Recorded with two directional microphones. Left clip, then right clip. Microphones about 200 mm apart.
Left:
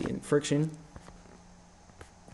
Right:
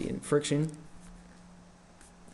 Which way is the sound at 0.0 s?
10° left (ahead or behind).